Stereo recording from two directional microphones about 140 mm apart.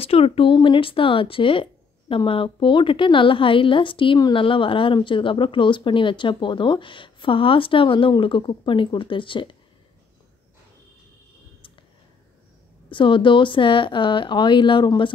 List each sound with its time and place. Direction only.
0.0 s speech: 45° left (ahead or behind)
12.9 s speech: 35° left (ahead or behind)